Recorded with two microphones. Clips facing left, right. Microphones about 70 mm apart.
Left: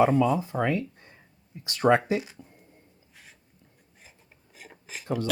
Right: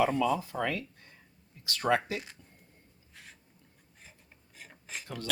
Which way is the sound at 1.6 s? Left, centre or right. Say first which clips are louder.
Left 7 dB; left.